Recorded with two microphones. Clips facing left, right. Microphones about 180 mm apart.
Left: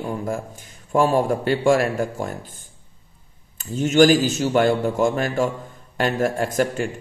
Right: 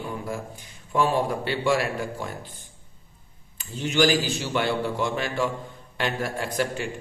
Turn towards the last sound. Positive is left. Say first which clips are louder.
# left 6 dB
turn(degrees=45)  # may be behind; listen again after turning